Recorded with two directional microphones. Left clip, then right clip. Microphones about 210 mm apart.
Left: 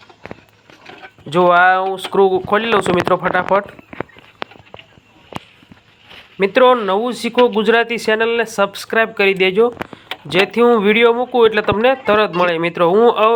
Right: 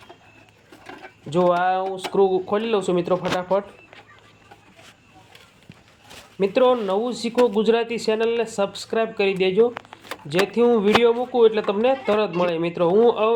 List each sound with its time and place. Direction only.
1.5 s speech: 10° left (ahead or behind)
6.4 s speech: 10° left (ahead or behind)
7.3 s speech: 35° left (ahead or behind)
7.6 s speech: 10° left (ahead or behind)